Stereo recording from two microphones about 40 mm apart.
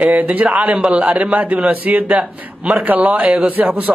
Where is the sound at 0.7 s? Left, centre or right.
Right.